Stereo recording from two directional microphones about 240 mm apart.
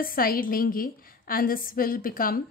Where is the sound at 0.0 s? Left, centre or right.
Left.